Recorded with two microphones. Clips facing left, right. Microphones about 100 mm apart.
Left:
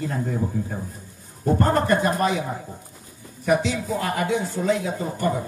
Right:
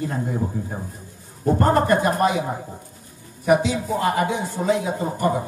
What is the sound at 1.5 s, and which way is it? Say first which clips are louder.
Speech: right 2 dB; 15° right (ahead or behind).